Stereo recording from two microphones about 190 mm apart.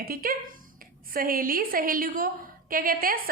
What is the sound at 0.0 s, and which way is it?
A woman's voice, 50° right (ahead or behind).